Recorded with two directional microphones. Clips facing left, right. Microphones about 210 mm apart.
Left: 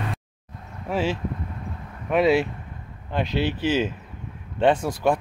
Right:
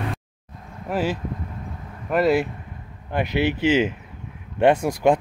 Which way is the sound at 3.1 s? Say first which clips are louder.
Right 2 dB; 15° right (ahead or behind).